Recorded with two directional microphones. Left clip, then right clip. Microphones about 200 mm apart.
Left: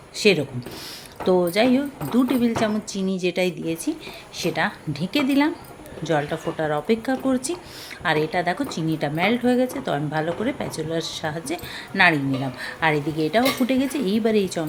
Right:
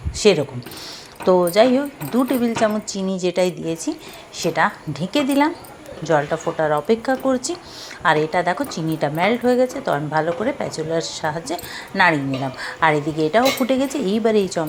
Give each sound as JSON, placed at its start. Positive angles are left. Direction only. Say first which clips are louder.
{"t": 0.2, "sound": "a woman's voice", "louder": "right 3 dB", "side_deg": 5}